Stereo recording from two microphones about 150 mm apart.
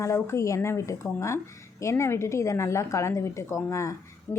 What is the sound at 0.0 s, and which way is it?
A woman's voice, 20° left (ahead or behind).